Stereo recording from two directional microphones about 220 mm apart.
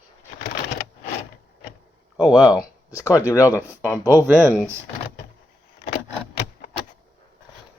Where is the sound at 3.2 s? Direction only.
15° left (ahead or behind).